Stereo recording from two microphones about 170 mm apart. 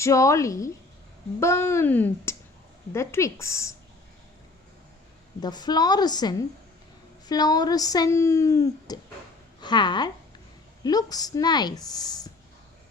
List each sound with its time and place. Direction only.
0.0 s speech: 20° left (ahead or behind)
5.4 s a woman's voice: 25° left (ahead or behind)